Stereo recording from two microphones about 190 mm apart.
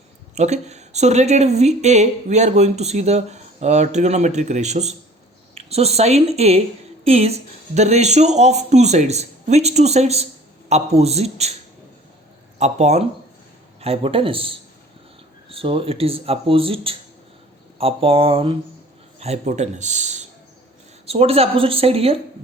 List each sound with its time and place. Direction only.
0.3 s speech: 35° right (ahead or behind)
12.5 s speech: 35° right (ahead or behind)